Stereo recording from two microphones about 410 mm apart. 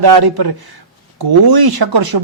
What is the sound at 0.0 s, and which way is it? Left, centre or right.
Speech, right.